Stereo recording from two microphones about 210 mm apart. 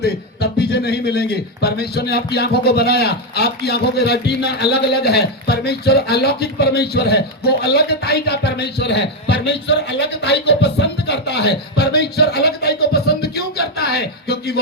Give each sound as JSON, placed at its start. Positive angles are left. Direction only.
{"t": 0.0, "sound": "a man's voice", "side_deg": 50}